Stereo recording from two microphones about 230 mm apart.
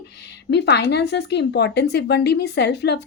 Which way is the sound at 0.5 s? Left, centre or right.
Left.